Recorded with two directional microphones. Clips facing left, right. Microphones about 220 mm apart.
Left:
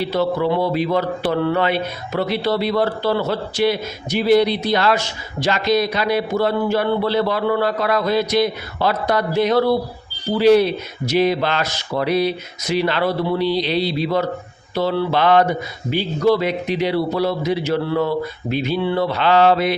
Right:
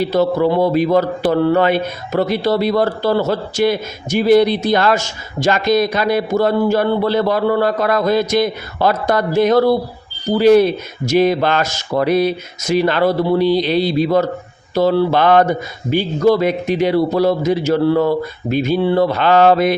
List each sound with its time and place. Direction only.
0.0 s a man's voice: 45° right (ahead or behind)